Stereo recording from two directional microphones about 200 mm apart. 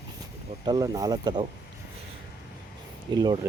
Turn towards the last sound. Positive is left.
turn(degrees=-20)  # may be behind; listen again after turning